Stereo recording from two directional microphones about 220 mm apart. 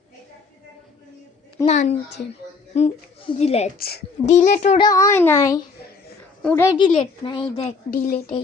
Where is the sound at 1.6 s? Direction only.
35° left (ahead or behind).